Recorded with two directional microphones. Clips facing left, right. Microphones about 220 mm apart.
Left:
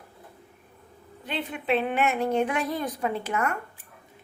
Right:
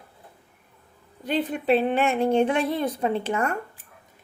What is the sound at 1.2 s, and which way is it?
A woman's voice, 40° right (ahead or behind).